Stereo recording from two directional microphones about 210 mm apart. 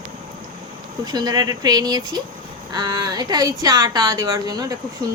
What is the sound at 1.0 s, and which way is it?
A woman's voice, 20° right (ahead or behind).